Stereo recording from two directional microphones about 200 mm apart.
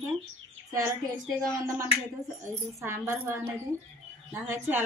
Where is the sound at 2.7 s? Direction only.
10° right (ahead or behind).